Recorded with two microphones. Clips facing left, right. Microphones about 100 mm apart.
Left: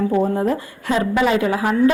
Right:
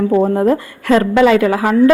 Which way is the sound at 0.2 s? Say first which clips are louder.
Right 6 dB; 60° right (ahead or behind).